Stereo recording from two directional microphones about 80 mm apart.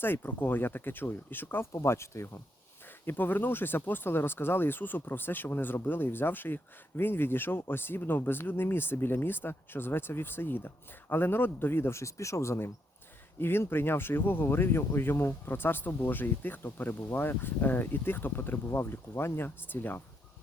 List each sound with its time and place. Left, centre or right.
0.0 s speech: left
1.7 s speech: left
3.1 s speech: left